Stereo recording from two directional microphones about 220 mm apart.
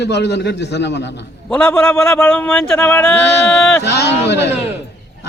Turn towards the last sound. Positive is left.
turn(degrees=50)  # may be behind; listen again after turning